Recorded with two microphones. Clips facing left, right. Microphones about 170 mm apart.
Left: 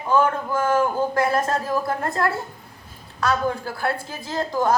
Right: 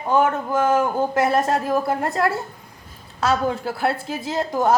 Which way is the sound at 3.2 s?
25° right (ahead or behind).